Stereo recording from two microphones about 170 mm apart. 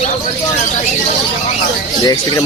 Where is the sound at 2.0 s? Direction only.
20° left (ahead or behind).